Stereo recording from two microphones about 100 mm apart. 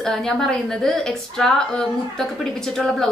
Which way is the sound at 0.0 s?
5° left (ahead or behind).